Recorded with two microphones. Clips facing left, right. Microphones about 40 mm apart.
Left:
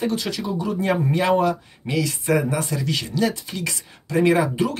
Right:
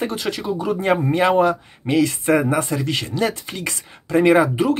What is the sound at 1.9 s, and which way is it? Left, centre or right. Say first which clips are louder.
Speech: right 5 dB; right.